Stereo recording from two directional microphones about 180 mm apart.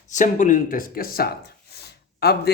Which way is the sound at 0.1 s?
45° left (ahead or behind).